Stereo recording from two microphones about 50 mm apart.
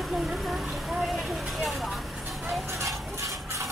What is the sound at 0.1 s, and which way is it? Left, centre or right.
Vehicle, centre.